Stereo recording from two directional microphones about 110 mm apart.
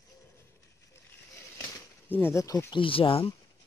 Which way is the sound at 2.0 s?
20° left (ahead or behind).